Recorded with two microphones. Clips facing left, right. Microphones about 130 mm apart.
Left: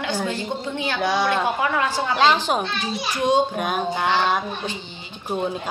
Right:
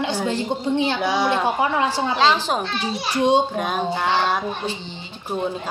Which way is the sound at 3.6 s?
5° left (ahead or behind).